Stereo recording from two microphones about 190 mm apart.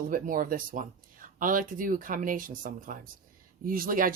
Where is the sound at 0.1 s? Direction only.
45° right (ahead or behind).